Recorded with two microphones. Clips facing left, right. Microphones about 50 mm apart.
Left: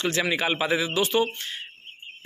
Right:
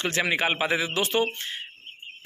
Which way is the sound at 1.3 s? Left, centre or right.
Right.